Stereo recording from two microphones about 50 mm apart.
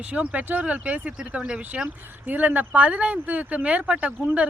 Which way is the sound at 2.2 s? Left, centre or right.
Right.